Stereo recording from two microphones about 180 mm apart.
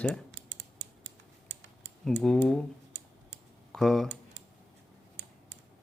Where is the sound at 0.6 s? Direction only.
80° right.